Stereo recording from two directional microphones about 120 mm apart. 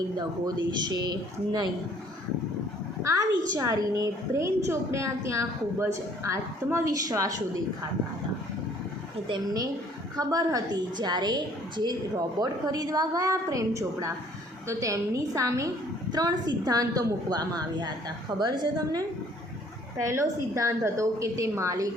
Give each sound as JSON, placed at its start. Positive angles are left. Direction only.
{"t": 0.7, "sound": "a woman's voice", "side_deg": -35}
{"t": 3.0, "sound": "a woman's voice", "side_deg": -25}
{"t": 10.2, "sound": "a woman's voice", "side_deg": -30}